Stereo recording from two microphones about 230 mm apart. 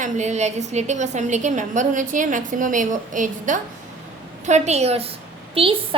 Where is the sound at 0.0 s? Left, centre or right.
Right.